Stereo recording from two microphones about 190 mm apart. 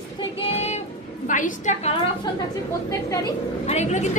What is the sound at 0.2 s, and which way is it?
Child singing, 30° left (ahead or behind).